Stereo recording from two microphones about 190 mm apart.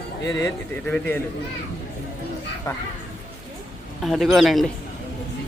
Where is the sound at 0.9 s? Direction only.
5° left (ahead or behind).